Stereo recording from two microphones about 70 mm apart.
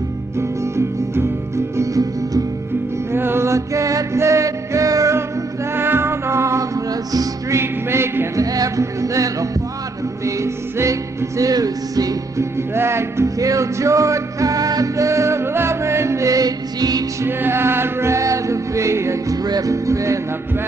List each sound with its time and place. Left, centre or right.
0.4 s music: right
1.8 s music: right
3.1 s music: right
5.8 s music: right
7.1 s music: right
7.5 s music: right
8.4 s music: right
12.7 s music: right
13.4 s music: right
17.4 s music: right
19.4 s music: right
19.7 s music: right